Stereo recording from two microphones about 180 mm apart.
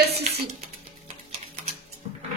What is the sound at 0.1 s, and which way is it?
Music, 35° right (ahead or behind).